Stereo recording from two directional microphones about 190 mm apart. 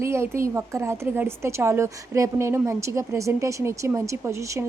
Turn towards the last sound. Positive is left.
turn(degrees=-15)  # may be behind; listen again after turning